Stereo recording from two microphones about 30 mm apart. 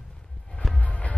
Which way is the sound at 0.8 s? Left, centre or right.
Left.